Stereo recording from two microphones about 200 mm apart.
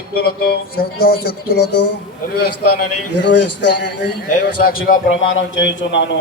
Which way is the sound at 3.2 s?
60° left (ahead or behind).